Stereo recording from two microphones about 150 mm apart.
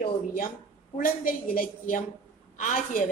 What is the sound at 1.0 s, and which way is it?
A woman's voice, 65° left (ahead or behind).